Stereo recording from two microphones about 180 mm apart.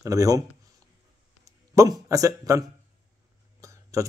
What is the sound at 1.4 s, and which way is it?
Speech, 15° right (ahead or behind).